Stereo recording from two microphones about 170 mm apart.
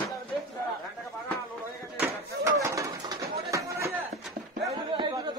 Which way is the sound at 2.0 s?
15° right (ahead or behind).